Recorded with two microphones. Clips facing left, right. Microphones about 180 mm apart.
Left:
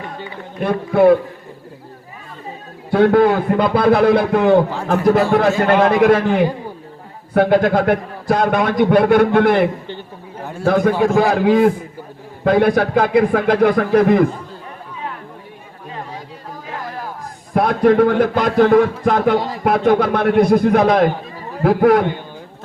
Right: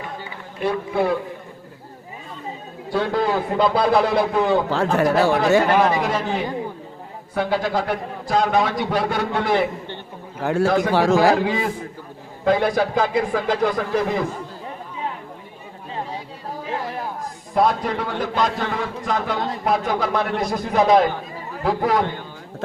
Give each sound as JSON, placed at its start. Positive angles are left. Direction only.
{"t": 0.6, "sound": "a man's voice", "side_deg": 55}
{"t": 2.9, "sound": "a man's voice", "side_deg": 60}
{"t": 10.4, "sound": "a man's voice", "side_deg": -85}
{"t": 11.4, "sound": "a man's voice", "side_deg": 55}
{"t": 17.5, "sound": "a man's voice", "side_deg": 60}